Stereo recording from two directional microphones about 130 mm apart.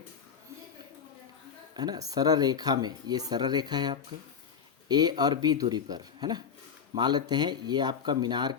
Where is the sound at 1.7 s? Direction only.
30° right (ahead or behind).